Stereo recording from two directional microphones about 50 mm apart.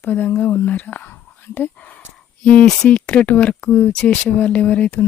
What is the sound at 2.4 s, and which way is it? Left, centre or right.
Speech, left.